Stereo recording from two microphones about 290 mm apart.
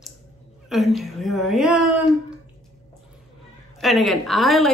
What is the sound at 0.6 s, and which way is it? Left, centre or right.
A woman's voice, centre.